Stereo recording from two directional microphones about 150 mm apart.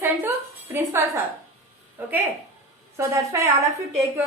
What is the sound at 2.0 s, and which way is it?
A woman's voice, 10° right (ahead or behind).